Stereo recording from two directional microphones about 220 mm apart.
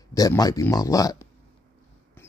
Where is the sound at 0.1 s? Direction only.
15° left (ahead or behind).